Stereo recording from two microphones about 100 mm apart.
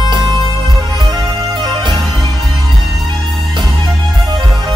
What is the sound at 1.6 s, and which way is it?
Music, 50° right (ahead or behind).